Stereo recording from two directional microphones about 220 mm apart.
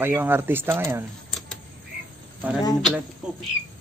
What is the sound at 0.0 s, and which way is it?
Speech, 10° right (ahead or behind).